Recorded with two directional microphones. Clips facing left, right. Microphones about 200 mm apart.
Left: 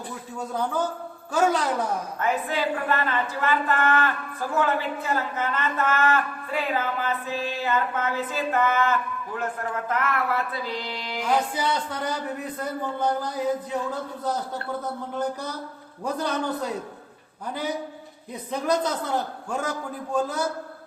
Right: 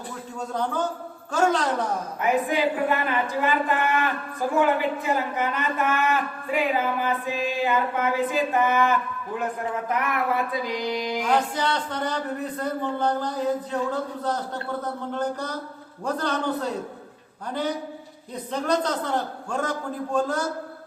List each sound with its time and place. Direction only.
1.3 s a man's voice: 10° left (ahead or behind)
2.2 s a woman's voice: 15° right (ahead or behind)
11.3 s a man's voice: 10° left (ahead or behind)
15.1 s a man's voice: 10° left (ahead or behind)
18.5 s a man's voice: 10° left (ahead or behind)